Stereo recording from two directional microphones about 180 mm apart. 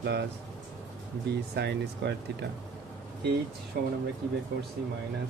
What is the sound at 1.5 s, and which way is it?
Speech, 70° right (ahead or behind).